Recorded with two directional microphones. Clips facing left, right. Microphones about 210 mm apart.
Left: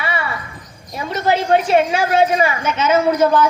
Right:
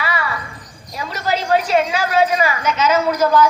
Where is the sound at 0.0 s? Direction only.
25° left (ahead or behind).